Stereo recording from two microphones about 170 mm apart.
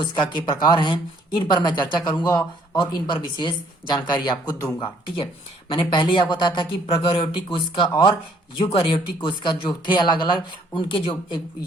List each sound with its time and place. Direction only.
0.0 s speech: 25° left (ahead or behind)